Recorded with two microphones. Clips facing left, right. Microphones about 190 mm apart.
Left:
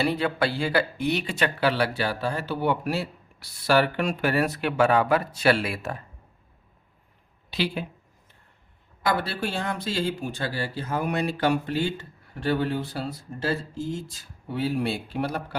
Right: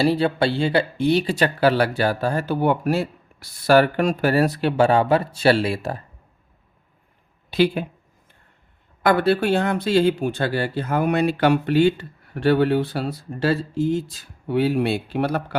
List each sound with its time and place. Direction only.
0.0 s speech: 30° right (ahead or behind)
7.5 s speech: 50° right (ahead or behind)
9.0 s speech: 60° right (ahead or behind)